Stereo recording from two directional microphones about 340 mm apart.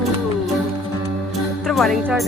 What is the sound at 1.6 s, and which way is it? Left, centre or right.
Speech, centre.